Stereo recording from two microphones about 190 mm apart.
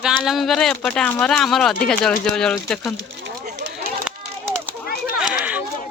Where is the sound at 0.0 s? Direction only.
Centre (ahead or behind).